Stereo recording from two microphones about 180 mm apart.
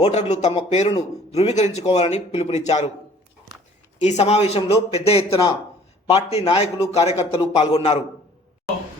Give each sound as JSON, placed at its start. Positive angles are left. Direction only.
{"t": 0.0, "sound": "speech", "side_deg": 40}
{"t": 4.0, "sound": "speech", "side_deg": 35}